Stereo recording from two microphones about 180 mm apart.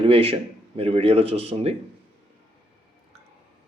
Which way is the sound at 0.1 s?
35° right (ahead or behind).